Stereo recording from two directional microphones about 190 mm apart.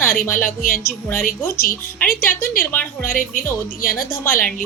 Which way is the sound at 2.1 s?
50° left (ahead or behind).